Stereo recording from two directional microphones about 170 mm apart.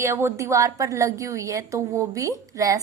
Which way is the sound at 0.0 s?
15° right (ahead or behind).